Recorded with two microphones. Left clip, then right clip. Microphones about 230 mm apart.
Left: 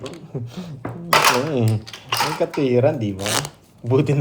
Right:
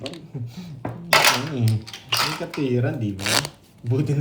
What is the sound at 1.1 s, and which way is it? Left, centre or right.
Dishes, centre.